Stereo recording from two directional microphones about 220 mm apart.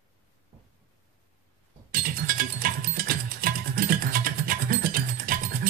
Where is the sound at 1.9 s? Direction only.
40° right (ahead or behind).